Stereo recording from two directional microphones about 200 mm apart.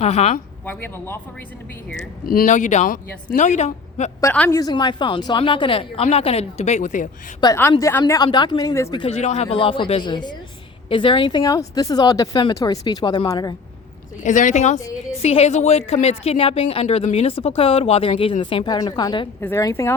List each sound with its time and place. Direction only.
0.0 s speech: 35° left (ahead or behind)
0.6 s speech: 10° left (ahead or behind)
2.2 s speech: 45° left (ahead or behind)
4.2 s speech: 10° left (ahead or behind); by 7.1 s 40° left (ahead or behind)
7.4 s speech: 10° left (ahead or behind)
9.0 s speech: 30° left (ahead or behind)
14.2 s speech: 40° left (ahead or behind); by 19.9 s 15° left (ahead or behind)